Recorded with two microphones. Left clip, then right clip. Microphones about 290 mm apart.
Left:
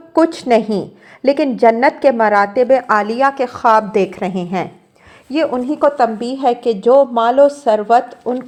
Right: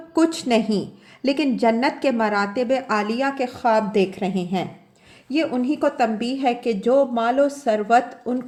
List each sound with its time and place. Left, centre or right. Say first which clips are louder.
0.1 s a woman's voice: left 7 dB; centre